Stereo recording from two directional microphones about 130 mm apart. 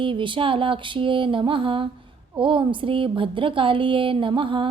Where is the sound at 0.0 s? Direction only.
40° right (ahead or behind).